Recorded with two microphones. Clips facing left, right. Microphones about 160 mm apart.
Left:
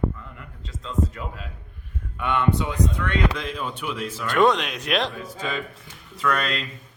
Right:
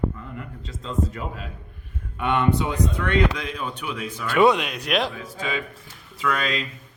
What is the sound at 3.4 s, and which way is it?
A man's voice, centre (ahead or behind).